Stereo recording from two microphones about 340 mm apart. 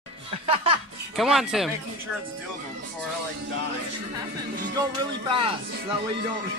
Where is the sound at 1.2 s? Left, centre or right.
Centre.